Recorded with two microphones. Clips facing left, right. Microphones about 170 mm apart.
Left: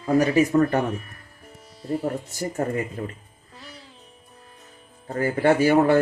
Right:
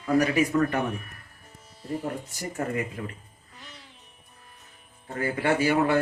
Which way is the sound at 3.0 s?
35° left (ahead or behind).